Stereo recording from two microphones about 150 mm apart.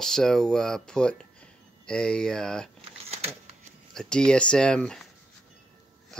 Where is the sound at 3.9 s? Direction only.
5° left (ahead or behind).